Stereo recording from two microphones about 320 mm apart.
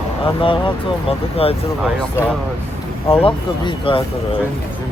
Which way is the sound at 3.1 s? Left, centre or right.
Centre.